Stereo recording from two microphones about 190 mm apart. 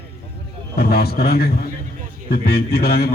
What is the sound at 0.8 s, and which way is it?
A man's voice, 55° left (ahead or behind).